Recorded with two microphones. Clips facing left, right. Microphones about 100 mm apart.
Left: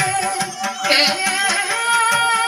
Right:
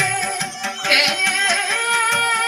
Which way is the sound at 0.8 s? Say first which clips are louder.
Left 2 dB; 60° left (ahead or behind).